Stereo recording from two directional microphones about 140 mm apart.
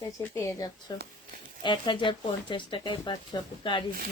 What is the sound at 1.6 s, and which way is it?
Speech, 35° left (ahead or behind).